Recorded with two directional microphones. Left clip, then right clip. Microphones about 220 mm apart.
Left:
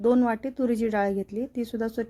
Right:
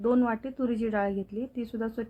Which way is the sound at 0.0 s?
30° left (ahead or behind).